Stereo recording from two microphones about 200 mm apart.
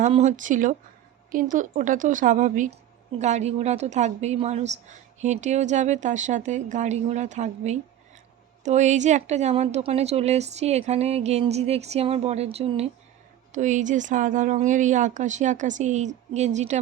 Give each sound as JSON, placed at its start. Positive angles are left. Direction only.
{"t": 0.0, "sound": "a woman's voice", "side_deg": -35}